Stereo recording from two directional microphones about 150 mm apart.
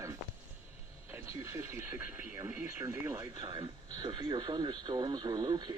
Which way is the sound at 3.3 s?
30° right (ahead or behind).